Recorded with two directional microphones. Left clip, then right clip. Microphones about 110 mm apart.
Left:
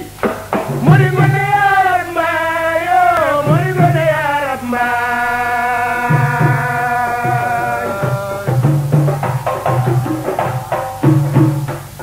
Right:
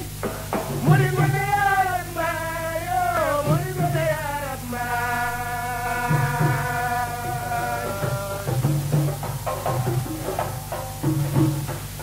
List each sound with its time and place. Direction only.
0.2 s music: 30° left (ahead or behind); by 4.9 s 45° left (ahead or behind)
4.9 s music: 30° left (ahead or behind)
9.5 s music: 30° left (ahead or behind)